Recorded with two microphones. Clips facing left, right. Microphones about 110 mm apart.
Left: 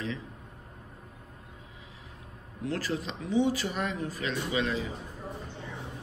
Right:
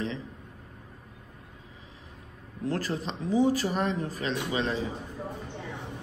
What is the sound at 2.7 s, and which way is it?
Speech, 40° right (ahead or behind).